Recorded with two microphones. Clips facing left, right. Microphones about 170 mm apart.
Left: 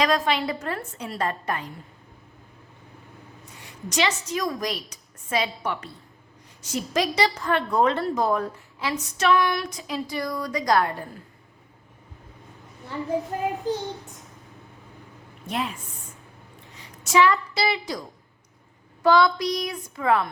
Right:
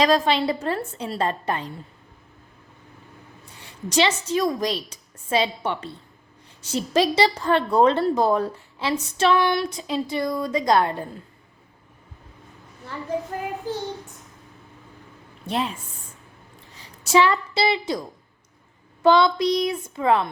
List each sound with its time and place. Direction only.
0.0 s a woman's voice: 30° right (ahead or behind)
3.5 s a sound: 30° right (ahead or behind)
4.3 s a woman's voice: 25° right (ahead or behind)
13.7 s a child's voice: 20° left (ahead or behind)
15.4 s a woman's voice: 25° right (ahead or behind)
17.0 s a woman's voice: 30° right (ahead or behind)